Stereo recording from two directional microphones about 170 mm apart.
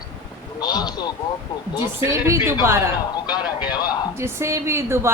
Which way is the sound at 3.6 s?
25° left (ahead or behind).